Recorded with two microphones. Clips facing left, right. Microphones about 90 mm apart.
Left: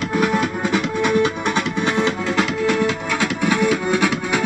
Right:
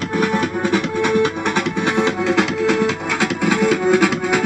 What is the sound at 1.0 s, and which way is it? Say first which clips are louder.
Music: even; 25° right (ahead or behind).